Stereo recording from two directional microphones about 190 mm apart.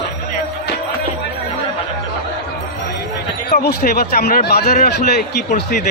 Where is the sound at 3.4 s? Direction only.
60° left (ahead or behind).